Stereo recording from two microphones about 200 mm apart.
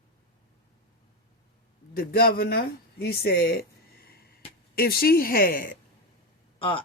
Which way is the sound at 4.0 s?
50° left (ahead or behind).